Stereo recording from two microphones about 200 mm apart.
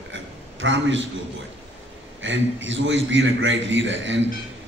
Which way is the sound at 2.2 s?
70° right (ahead or behind).